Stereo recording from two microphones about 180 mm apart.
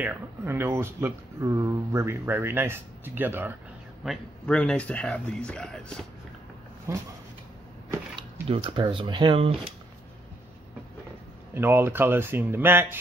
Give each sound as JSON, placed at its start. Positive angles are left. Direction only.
{"t": 0.0, "sound": "speech", "side_deg": -10}
{"t": 4.0, "sound": "speech", "side_deg": 0}
{"t": 6.9, "sound": "speech", "side_deg": -15}
{"t": 8.2, "sound": "speech", "side_deg": -30}
{"t": 11.5, "sound": "speech", "side_deg": -10}